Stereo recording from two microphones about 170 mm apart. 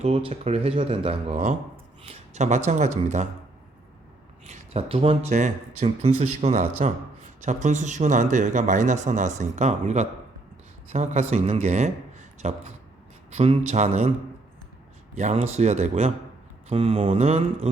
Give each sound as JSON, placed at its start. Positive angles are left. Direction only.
{"t": 0.0, "sound": "speech", "side_deg": -35}
{"t": 1.7, "sound": "a sound", "side_deg": -40}
{"t": 2.6, "sound": "speech", "side_deg": -40}
{"t": 4.4, "sound": "speech", "side_deg": -40}
{"t": 15.1, "sound": "speech", "side_deg": -40}